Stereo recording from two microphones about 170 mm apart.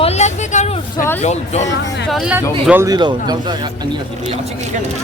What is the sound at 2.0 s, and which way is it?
Speech, 5° right (ahead or behind).